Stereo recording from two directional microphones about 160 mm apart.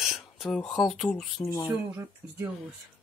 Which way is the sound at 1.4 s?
20° left (ahead or behind).